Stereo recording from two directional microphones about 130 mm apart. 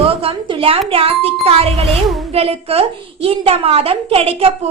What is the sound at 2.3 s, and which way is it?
A woman's voice, 50° right (ahead or behind).